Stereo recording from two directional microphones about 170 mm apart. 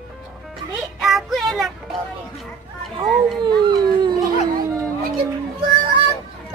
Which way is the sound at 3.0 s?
Centre (ahead or behind).